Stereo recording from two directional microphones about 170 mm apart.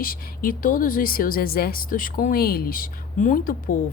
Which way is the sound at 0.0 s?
55° left (ahead or behind).